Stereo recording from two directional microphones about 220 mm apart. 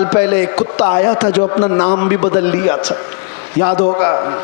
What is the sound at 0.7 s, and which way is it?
A man's voice, 25° left (ahead or behind).